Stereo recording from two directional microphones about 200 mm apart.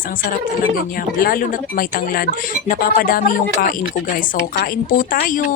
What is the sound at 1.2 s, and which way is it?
Speech, 45° left (ahead or behind).